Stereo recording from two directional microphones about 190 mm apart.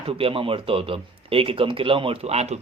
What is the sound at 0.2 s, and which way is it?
Speech, 30° right (ahead or behind).